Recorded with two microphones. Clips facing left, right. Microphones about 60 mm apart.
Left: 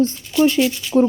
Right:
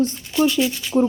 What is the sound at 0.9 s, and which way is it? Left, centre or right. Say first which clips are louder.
Speech: left 3 dB; centre.